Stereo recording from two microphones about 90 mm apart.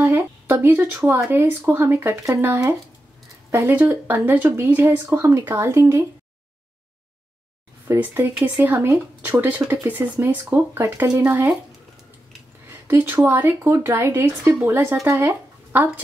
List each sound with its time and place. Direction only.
0.0 s a sound: 30° right (ahead or behind)
1.3 s speech: 25° right (ahead or behind)
8.0 s speech: 25° right (ahead or behind)
10.4 s speech: 30° right (ahead or behind)
12.8 s speech: 25° right (ahead or behind)